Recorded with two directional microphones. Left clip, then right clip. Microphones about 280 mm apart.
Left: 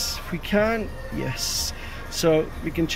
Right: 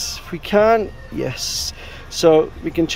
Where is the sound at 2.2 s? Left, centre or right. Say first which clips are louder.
Right 8 dB; centre.